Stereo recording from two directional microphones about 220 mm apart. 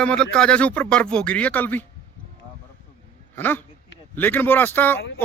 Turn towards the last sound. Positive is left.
turn(degrees=10)  # may be behind; listen again after turning